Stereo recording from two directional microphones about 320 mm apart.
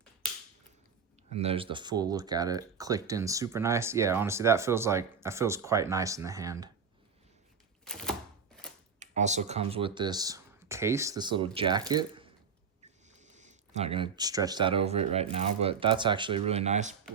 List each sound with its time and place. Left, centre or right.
1.3 s speech: centre
7.9 s a sound: centre
9.0 s speech: right